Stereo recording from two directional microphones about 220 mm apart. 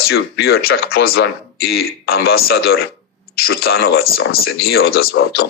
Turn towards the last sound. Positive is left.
turn(degrees=45)  # may be behind; listen again after turning